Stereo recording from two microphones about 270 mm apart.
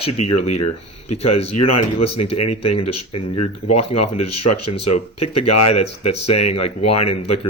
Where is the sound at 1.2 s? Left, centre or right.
Left.